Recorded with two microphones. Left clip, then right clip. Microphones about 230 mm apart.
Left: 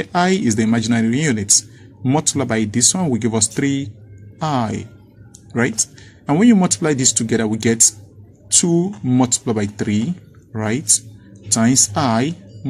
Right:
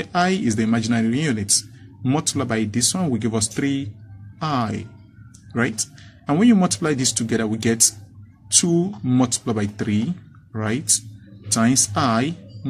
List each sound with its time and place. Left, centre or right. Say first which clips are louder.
0.0 s speech: left 3 dB; centre